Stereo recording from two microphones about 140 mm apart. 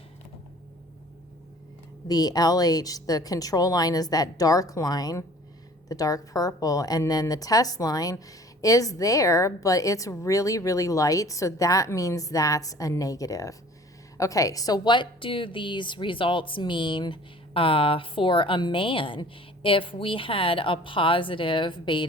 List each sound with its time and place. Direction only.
2.0 s a woman's voice: 30° left (ahead or behind)